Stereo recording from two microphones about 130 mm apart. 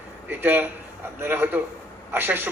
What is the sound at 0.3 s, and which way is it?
A man's voice, 15° right (ahead or behind).